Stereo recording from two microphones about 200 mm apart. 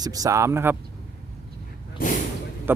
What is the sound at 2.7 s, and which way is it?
Speech, 10° right (ahead or behind).